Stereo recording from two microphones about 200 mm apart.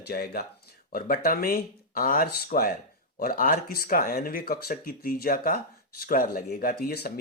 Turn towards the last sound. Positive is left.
turn(degrees=50)  # may be behind; listen again after turning